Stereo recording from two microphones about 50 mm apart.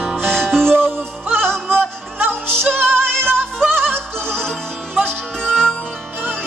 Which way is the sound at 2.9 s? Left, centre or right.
Centre.